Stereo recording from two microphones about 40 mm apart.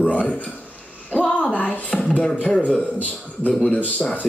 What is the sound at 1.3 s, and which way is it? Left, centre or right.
Music, left.